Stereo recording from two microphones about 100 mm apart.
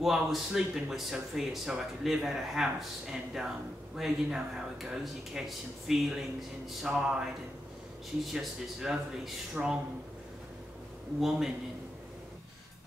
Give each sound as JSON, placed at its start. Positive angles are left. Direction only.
{"t": 0.0, "sound": "speech", "side_deg": -5}
{"t": 6.8, "sound": "a sound", "side_deg": -5}
{"t": 8.3, "sound": "speech", "side_deg": 0}
{"t": 11.1, "sound": "speech", "side_deg": -5}